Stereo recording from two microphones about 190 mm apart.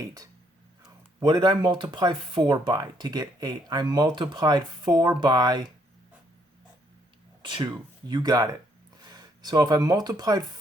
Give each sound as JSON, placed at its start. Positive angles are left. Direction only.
{"t": 1.2, "sound": "speech", "side_deg": -25}
{"t": 7.4, "sound": "speech", "side_deg": -25}